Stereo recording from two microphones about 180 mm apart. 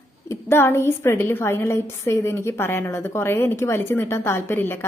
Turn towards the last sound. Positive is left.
turn(degrees=10)  # may be behind; listen again after turning